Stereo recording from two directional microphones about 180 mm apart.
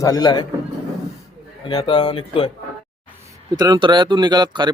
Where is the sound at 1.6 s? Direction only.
25° left (ahead or behind).